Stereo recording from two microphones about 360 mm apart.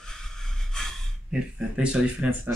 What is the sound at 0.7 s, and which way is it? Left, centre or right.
Speech, centre.